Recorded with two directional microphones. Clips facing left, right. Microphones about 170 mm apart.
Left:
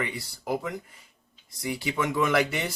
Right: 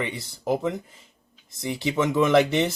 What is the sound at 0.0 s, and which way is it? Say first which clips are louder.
Speech: right 3 dB; 25° right (ahead or behind).